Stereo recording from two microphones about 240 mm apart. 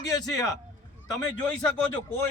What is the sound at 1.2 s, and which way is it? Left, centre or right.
A man's voice, centre.